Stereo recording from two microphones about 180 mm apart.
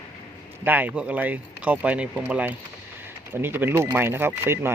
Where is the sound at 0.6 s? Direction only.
10° right (ahead or behind).